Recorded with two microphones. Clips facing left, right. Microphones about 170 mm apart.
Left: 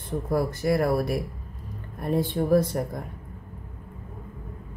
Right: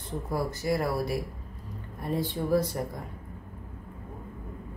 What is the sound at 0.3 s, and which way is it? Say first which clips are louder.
Speech: left 5 dB; 60° left (ahead or behind).